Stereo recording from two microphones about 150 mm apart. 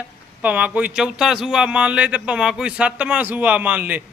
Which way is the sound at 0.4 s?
10° right (ahead or behind).